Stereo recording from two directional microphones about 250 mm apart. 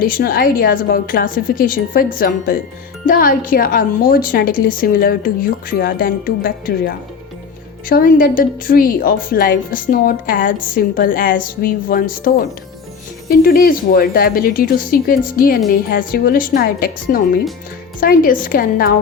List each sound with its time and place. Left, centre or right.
0.0 s a woman's voice: left